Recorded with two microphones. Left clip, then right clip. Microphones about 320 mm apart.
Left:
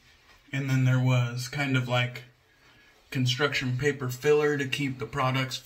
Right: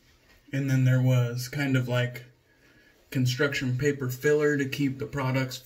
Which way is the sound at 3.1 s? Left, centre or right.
Centre.